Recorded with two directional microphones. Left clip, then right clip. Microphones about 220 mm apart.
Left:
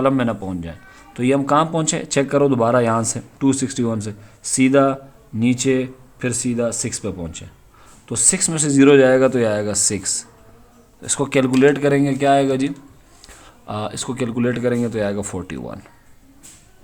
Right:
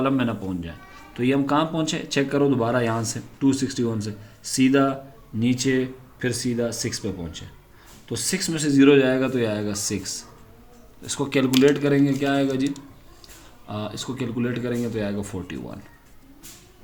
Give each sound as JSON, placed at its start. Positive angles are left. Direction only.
{"t": 0.0, "sound": "a man's voice", "side_deg": 35}